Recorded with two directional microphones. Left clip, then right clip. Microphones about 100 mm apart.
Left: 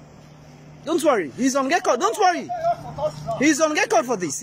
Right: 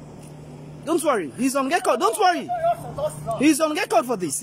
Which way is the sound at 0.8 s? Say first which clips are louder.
Left 2 dB; 5° right (ahead or behind).